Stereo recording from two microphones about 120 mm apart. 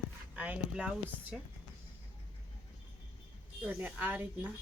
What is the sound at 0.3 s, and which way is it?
Speech, 10° right (ahead or behind).